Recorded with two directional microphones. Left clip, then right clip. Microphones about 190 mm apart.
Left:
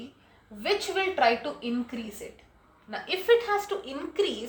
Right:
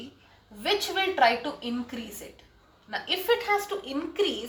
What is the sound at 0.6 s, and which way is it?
Speech, 30° left (ahead or behind).